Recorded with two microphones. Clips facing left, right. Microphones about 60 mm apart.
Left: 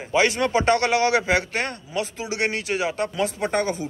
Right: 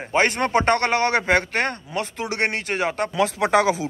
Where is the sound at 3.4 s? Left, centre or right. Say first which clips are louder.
Right 7 dB; right.